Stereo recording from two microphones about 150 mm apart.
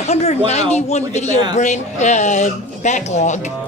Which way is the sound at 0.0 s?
45° left (ahead or behind).